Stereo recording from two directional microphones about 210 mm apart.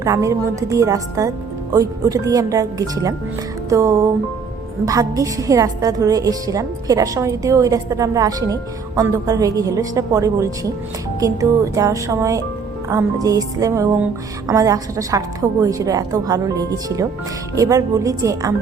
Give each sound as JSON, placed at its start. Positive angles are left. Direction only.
{"t": 0.0, "sound": "a woman's voice", "side_deg": -15}